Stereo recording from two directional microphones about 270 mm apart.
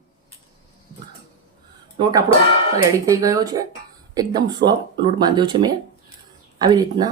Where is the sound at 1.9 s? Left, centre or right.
Centre.